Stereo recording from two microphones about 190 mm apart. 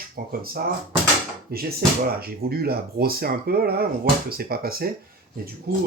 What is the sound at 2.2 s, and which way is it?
Speech, 55° right (ahead or behind).